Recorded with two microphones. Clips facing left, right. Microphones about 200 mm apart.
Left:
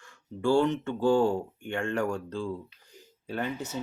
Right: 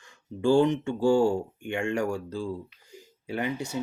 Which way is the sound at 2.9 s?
10° right (ahead or behind).